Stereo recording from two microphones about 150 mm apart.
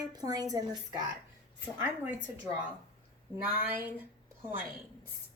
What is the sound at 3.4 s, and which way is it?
Speech, 10° right (ahead or behind).